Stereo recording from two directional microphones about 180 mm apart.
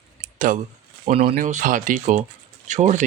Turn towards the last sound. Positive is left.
turn(degrees=-40)  # may be behind; listen again after turning